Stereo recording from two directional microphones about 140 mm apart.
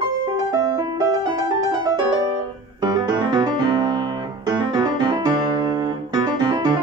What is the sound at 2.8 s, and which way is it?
Piano, 35° right (ahead or behind).